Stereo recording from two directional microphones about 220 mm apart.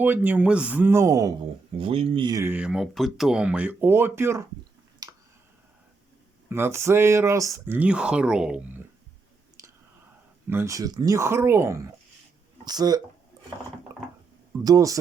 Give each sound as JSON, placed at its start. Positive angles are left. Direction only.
{"t": 0.0, "sound": "a man's voice", "side_deg": -10}
{"t": 5.0, "sound": "a sound", "side_deg": -20}
{"t": 6.5, "sound": "a man's voice", "side_deg": -10}
{"t": 10.5, "sound": "a man's voice", "side_deg": -10}
{"t": 13.9, "sound": "a sound", "side_deg": -15}
{"t": 14.6, "sound": "a man's voice", "side_deg": -15}